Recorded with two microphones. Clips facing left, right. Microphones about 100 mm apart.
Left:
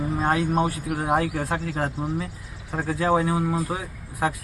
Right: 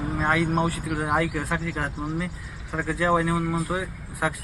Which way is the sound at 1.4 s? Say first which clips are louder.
Left 2 dB; 40° left (ahead or behind).